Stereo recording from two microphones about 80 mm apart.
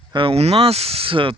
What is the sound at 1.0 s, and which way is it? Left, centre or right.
Speech, right.